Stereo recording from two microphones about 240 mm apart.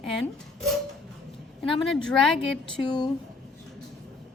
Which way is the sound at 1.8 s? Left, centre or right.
Centre.